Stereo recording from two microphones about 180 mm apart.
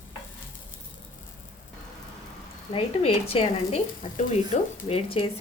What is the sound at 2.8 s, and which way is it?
Speech, 30° left (ahead or behind).